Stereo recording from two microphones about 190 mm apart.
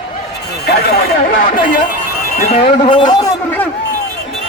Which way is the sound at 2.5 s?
30° left (ahead or behind).